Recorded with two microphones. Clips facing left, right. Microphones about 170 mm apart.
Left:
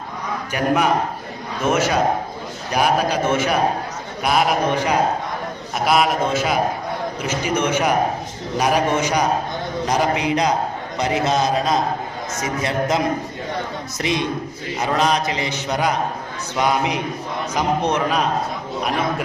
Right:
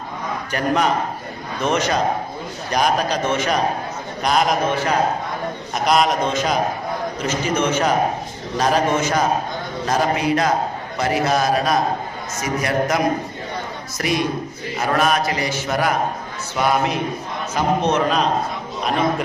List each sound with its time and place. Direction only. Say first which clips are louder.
0.5 s a man's voice: left 1 dB; 10° left (ahead or behind)
5.8 s a man's voice: even; 5° left (ahead or behind); by 13.0 s 20° left (ahead or behind)
14.0 s a man's voice: right 1 dB; 20° left (ahead or behind)